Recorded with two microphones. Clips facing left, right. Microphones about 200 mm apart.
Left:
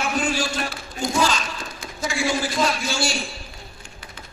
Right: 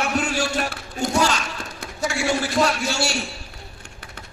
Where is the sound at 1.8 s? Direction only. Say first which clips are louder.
Right 1 dB; 70° right (ahead or behind).